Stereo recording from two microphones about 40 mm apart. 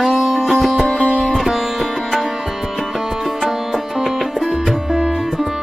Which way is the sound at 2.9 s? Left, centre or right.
Centre.